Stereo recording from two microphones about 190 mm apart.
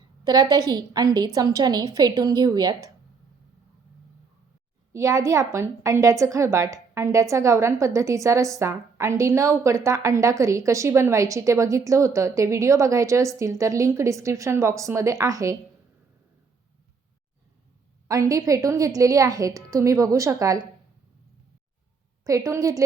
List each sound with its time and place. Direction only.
0.0 s a woman's voice: 20° right (ahead or behind)
4.9 s a woman's voice: 15° right (ahead or behind)
18.1 s a woman's voice: 15° right (ahead or behind)
22.2 s a woman's voice: 15° right (ahead or behind)